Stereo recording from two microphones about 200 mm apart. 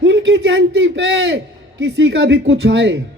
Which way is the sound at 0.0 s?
65° right (ahead or behind).